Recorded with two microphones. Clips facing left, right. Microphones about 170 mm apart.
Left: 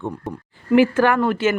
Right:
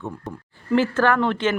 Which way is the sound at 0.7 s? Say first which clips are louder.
Left 4 dB; 10° left (ahead or behind).